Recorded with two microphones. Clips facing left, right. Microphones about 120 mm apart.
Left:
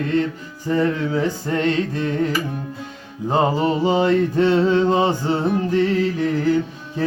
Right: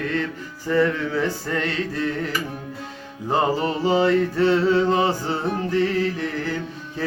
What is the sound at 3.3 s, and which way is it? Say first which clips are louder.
Mantra: left 3 dB; 20° left (ahead or behind).